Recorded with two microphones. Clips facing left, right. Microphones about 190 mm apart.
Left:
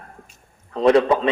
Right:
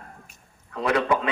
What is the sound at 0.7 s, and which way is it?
Speech, 30° left (ahead or behind).